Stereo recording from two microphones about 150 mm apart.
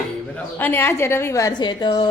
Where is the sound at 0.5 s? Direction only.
15° left (ahead or behind); by 2.1 s 30° left (ahead or behind).